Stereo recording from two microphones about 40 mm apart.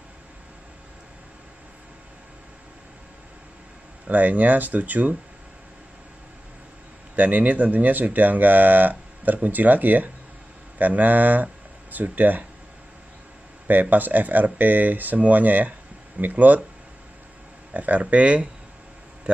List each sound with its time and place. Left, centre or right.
4.1 s speech: right
7.2 s speech: right
13.7 s speech: right
17.7 s speech: right